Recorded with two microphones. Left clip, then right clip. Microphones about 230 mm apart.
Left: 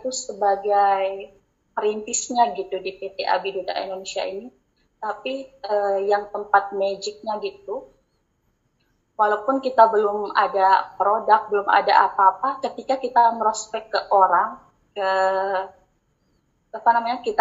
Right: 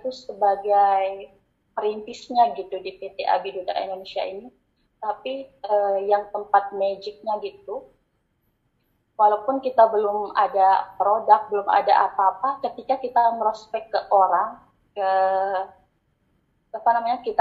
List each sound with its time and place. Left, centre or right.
0.6 s a woman's voice: centre
9.6 s a woman's voice: centre
16.7 s a woman's voice: centre